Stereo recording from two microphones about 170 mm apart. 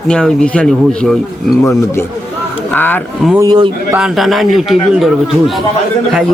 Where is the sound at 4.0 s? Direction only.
Centre (ahead or behind).